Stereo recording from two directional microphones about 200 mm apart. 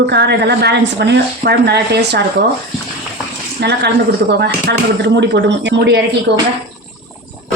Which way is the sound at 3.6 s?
55° right (ahead or behind).